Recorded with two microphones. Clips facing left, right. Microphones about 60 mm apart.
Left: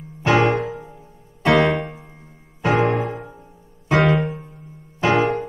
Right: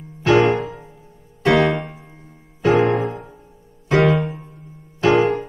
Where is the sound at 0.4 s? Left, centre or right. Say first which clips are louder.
Right 2 dB; centre.